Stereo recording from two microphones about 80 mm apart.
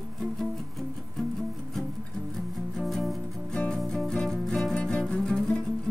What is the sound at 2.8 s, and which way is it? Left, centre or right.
Music, centre.